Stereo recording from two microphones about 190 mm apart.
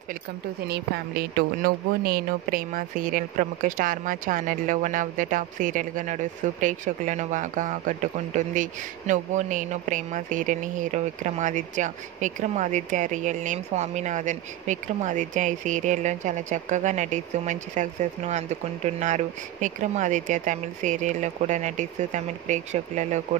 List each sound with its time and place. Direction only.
0.7 s speech: 55° right (ahead or behind); by 23.2 s 40° right (ahead or behind)